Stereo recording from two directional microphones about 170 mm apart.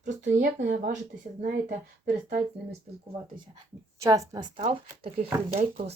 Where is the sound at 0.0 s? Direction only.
45° right (ahead or behind).